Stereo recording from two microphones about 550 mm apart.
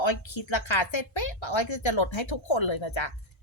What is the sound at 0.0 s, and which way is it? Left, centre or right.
Speech, left.